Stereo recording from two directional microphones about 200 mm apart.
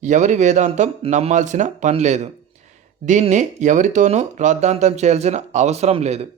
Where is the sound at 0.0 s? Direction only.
35° right (ahead or behind).